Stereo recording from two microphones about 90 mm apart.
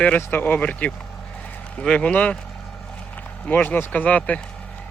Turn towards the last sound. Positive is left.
turn(degrees=15)  # may be behind; listen again after turning